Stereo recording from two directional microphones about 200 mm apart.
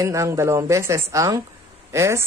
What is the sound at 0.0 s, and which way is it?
Speech, 15° right (ahead or behind).